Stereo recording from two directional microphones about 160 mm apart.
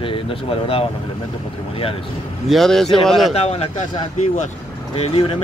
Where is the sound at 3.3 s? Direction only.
40° left (ahead or behind).